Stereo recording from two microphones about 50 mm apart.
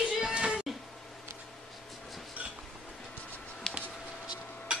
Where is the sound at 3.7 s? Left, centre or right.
Centre.